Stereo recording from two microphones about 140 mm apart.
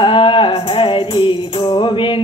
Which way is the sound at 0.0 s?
35° left (ahead or behind).